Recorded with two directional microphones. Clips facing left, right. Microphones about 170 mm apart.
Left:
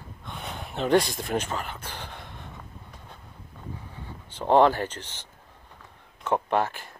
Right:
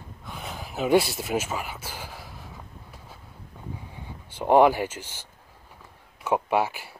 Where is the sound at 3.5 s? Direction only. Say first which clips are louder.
Right 1 dB; 15° right (ahead or behind).